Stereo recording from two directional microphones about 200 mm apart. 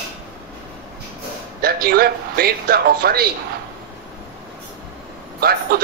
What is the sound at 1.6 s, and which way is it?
Speech, 50° right (ahead or behind).